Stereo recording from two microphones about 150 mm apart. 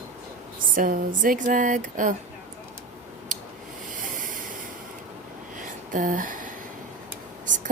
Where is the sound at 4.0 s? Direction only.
65° right (ahead or behind).